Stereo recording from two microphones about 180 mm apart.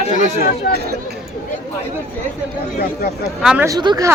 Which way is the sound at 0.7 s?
60° left (ahead or behind).